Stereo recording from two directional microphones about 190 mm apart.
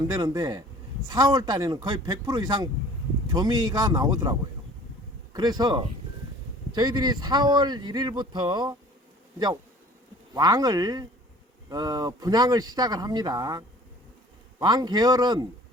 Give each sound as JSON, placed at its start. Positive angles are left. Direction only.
{"t": 0.1, "sound": "speech", "side_deg": -20}
{"t": 10.3, "sound": "speech", "side_deg": -20}